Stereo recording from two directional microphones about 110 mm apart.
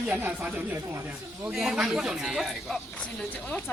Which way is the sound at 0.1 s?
15° right (ahead or behind).